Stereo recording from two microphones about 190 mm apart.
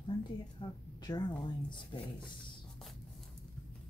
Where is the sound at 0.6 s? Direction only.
20° left (ahead or behind).